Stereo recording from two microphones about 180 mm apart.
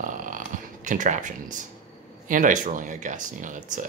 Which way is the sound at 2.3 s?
45° right (ahead or behind).